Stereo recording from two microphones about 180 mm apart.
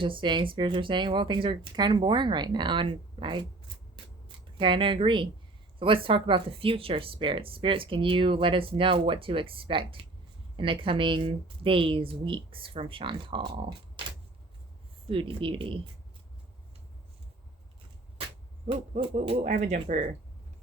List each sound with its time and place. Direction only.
0.0 s speech: 30° right (ahead or behind)
4.5 s speech: 30° right (ahead or behind)
15.0 s speech: 30° right (ahead or behind)
18.7 s speech: 35° right (ahead or behind)